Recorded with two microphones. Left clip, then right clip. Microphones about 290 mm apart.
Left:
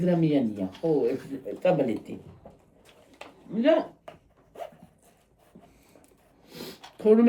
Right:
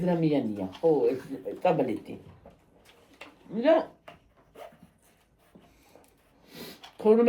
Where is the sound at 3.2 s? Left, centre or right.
Left.